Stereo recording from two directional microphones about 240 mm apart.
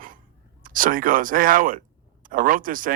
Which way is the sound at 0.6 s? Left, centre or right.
Right.